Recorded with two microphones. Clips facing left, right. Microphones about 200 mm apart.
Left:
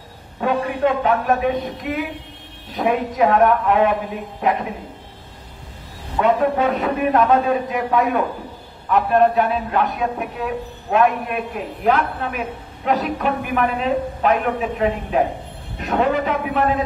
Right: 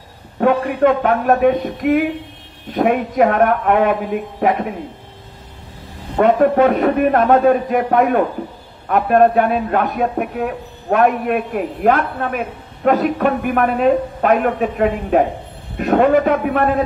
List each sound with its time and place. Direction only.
0.4 s a man's voice: 55° right (ahead or behind)
6.1 s a man's voice: 55° right (ahead or behind)